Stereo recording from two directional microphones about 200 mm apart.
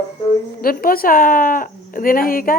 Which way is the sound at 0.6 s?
45° left (ahead or behind).